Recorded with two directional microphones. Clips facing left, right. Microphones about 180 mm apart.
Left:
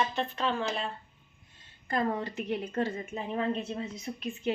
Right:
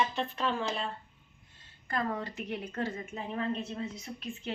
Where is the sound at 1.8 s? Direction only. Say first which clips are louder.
Left 3 dB; 25° left (ahead or behind).